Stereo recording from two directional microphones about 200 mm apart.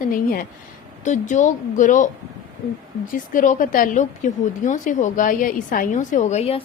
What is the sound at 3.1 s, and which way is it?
A woman's voice, 40° left (ahead or behind).